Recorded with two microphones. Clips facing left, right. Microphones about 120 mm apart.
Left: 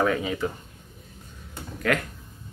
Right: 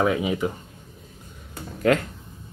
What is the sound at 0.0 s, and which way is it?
Speech, 15° right (ahead or behind).